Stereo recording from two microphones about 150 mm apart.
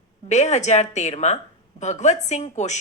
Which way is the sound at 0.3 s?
50° left (ahead or behind).